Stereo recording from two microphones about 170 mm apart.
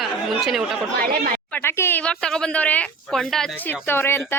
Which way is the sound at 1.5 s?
15° left (ahead or behind).